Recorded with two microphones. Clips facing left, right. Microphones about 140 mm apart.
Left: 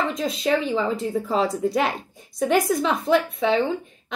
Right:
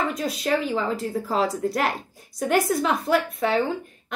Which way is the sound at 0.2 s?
5° right (ahead or behind).